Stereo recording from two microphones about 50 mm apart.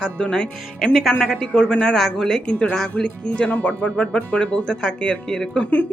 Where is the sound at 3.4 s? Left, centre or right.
Left.